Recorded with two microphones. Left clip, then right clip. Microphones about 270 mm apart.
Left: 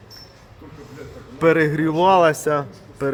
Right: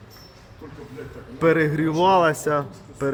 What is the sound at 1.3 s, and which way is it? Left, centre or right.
A man's voice, left.